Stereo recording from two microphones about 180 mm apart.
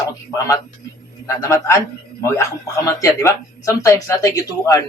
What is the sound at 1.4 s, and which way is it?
Speech, 15° left (ahead or behind).